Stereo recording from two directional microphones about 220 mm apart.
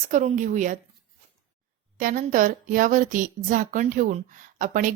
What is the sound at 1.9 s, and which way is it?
Speech, 35° right (ahead or behind).